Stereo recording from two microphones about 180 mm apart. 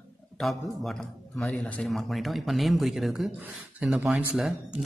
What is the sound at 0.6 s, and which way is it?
Speech, centre (ahead or behind).